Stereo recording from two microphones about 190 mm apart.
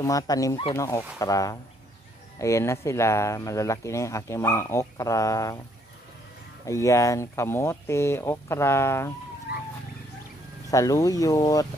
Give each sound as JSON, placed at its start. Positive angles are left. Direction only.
{"t": 0.0, "sound": "speech", "side_deg": 20}
{"t": 6.6, "sound": "speech", "side_deg": 15}
{"t": 10.7, "sound": "speech", "side_deg": 15}